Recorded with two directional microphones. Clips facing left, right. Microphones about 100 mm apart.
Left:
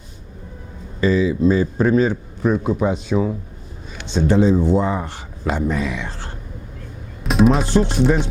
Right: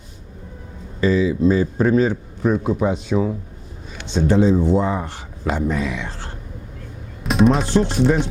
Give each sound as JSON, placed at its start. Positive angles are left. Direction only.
{"t": 1.0, "sound": "speech", "side_deg": 15}
{"t": 7.3, "sound": "music", "side_deg": 0}